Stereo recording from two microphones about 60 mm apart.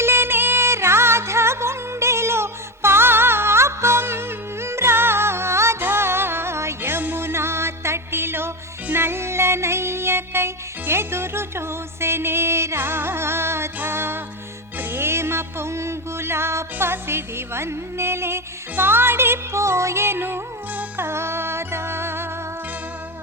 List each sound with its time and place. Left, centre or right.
0.0 s music: right
21.1 s music: right